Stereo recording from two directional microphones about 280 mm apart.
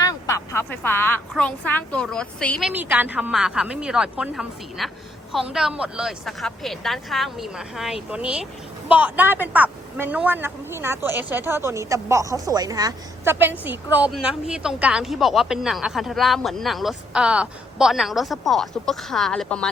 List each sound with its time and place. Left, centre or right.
0.0 s a woman's voice: centre